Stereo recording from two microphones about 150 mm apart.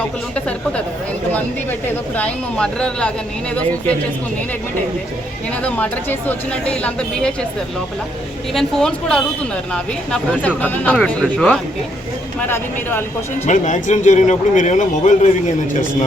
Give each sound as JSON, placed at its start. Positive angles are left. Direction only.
{"t": 2.1, "sound": "speech", "side_deg": 5}
{"t": 5.6, "sound": "speech", "side_deg": 10}
{"t": 8.5, "sound": "speech", "side_deg": 5}
{"t": 12.4, "sound": "speech", "side_deg": 15}
{"t": 13.4, "sound": "speech", "side_deg": 55}